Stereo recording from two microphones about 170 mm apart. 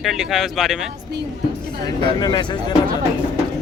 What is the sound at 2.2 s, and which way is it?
Speech, 25° left (ahead or behind).